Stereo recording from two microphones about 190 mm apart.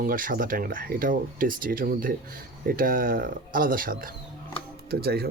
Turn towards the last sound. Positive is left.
turn(degrees=-55)  # may be behind; listen again after turning